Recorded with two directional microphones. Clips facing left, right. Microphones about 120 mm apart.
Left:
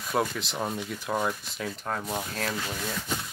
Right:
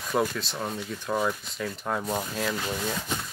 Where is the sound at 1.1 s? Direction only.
Centre (ahead or behind).